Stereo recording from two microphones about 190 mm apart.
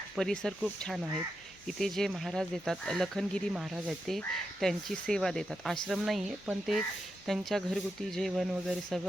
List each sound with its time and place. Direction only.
0.2 s speech: centre (ahead or behind)